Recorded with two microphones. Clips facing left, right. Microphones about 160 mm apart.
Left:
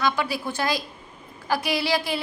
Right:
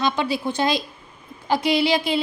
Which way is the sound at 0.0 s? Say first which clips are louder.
Right 3 dB; 25° right (ahead or behind).